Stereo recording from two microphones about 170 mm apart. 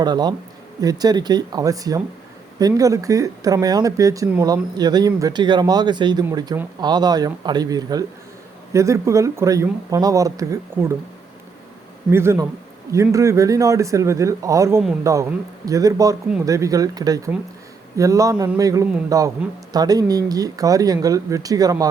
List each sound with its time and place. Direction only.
0.0 s speech: 25° right (ahead or behind)
12.1 s speech: 15° right (ahead or behind)